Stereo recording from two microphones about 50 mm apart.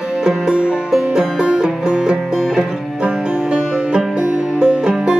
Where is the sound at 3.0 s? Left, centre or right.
Centre.